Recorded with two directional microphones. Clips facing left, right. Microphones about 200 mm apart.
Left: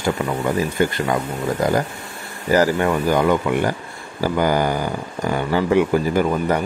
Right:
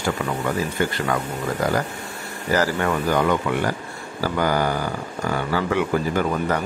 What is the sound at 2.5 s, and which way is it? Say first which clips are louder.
Speech: left 4 dB; 15° left (ahead or behind).